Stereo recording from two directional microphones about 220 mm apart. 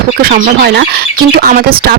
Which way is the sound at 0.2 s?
40° right (ahead or behind).